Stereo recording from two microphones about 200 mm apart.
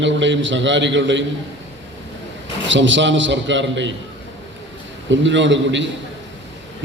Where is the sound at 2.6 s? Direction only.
70° right (ahead or behind).